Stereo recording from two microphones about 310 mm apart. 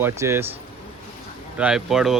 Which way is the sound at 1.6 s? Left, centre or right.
Centre.